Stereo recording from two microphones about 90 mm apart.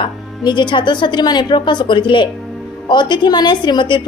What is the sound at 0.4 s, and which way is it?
A woman's voice, 60° left (ahead or behind).